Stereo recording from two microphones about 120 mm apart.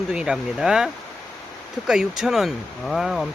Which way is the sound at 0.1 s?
5° right (ahead or behind).